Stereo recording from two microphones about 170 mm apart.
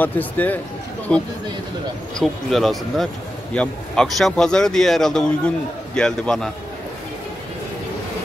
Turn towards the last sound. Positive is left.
turn(degrees=5)  # may be behind; listen again after turning